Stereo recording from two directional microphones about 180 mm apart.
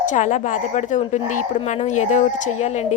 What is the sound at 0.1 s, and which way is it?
A woman's voice, 45° left (ahead or behind).